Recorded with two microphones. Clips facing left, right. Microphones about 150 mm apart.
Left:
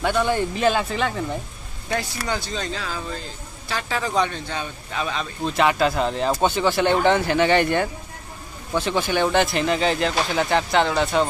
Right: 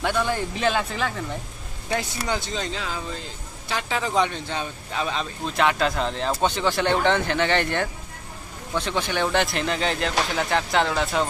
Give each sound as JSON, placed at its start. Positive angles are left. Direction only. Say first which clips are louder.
{"t": 0.0, "sound": "speech", "louder": "left 3 dB", "side_deg": 0}
{"t": 1.9, "sound": "a man's voice", "louder": "even", "side_deg": -20}
{"t": 5.4, "sound": "speech", "louder": "left 3 dB", "side_deg": 5}